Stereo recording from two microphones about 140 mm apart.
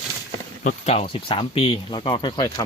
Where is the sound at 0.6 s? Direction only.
55° left (ahead or behind); by 2.6 s 30° left (ahead or behind).